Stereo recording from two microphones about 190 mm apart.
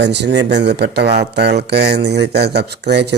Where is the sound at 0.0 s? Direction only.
65° right (ahead or behind).